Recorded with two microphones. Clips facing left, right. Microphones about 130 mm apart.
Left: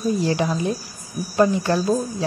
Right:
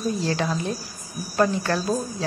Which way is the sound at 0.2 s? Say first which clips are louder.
Left 4 dB; 15° left (ahead or behind).